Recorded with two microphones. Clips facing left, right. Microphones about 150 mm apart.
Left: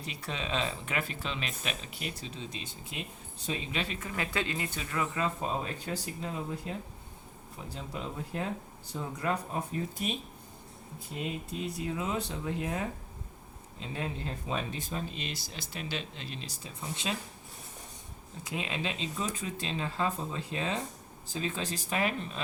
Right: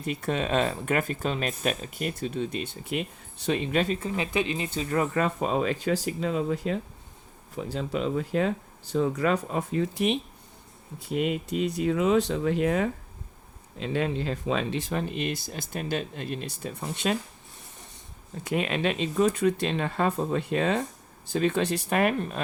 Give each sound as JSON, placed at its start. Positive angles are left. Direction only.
{"t": 0.0, "sound": "speech", "side_deg": -50}
{"t": 4.0, "sound": "speech", "side_deg": -20}
{"t": 4.9, "sound": "speech", "side_deg": -45}
{"t": 5.2, "sound": "speech", "side_deg": -90}
{"t": 18.4, "sound": "speech", "side_deg": -65}